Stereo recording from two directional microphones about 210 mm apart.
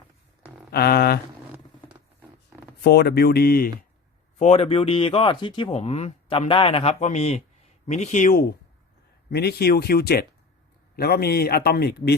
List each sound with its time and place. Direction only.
0.7 s speech: 50° left (ahead or behind)
2.8 s speech: 50° left (ahead or behind)
4.4 s speech: 30° left (ahead or behind)
9.3 s speech: 50° left (ahead or behind)